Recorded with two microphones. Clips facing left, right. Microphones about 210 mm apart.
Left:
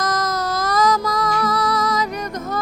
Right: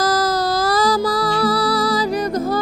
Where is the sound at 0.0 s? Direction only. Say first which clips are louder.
Right 4 dB; 30° right (ahead or behind).